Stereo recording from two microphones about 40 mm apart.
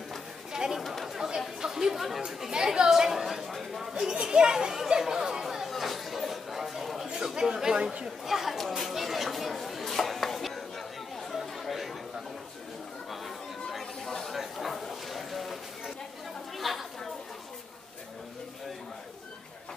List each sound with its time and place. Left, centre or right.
0.5 s chatter: centre
0.7 s chatter: centre
1.0 s chatter: centre
1.6 s speech: centre
2.5 s speech: centre
4.1 s speech: centre
5.4 s chatter: centre
7.3 s speech: centre
8.5 s chatter: centre
11.6 s chatter: centre
13.7 s a sound: centre
16.5 s chatter: centre